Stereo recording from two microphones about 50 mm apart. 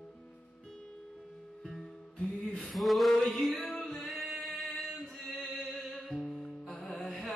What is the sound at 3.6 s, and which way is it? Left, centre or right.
Music, left.